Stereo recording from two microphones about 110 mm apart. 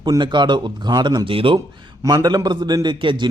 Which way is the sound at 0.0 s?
45° right (ahead or behind).